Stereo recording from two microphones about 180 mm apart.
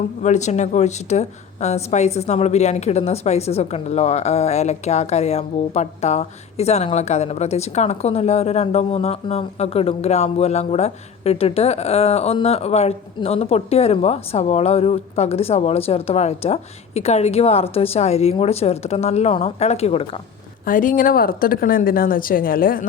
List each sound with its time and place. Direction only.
0.2 s speech: 40° left (ahead or behind)
20.7 s a woman's voice: 50° left (ahead or behind)